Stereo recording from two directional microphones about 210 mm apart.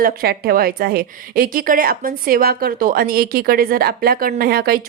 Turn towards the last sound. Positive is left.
turn(degrees=-45)  # may be behind; listen again after turning